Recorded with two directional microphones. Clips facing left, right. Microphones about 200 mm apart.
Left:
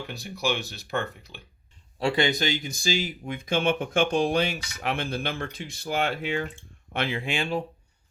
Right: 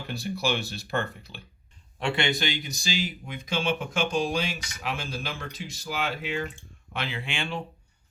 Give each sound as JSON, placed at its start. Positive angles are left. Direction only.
{"t": 0.1, "sound": "speech", "side_deg": 15}
{"t": 2.0, "sound": "speech", "side_deg": 35}
{"t": 2.4, "sound": "speech", "side_deg": 50}
{"t": 6.9, "sound": "speech", "side_deg": 45}